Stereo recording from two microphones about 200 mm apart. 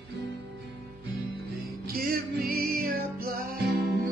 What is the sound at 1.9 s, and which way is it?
Music, 45° right (ahead or behind).